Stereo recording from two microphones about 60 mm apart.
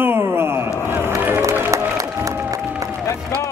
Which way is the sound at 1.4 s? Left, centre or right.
Right.